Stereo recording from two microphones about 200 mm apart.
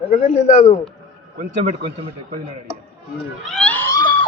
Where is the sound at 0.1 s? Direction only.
35° left (ahead or behind).